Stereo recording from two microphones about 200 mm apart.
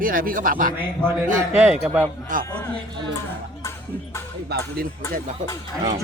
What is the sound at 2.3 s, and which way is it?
Speech, 40° right (ahead or behind).